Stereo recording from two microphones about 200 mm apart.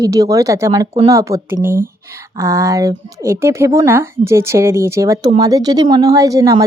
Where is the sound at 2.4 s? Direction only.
15° right (ahead or behind).